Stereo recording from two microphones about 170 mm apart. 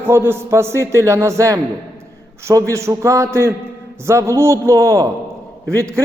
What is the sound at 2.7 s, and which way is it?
A man's voice, 15° right (ahead or behind).